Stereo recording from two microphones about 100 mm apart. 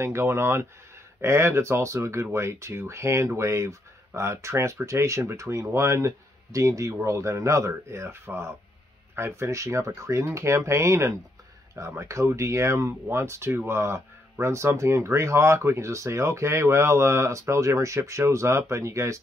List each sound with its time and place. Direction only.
0.0 s speech: 25° right (ahead or behind)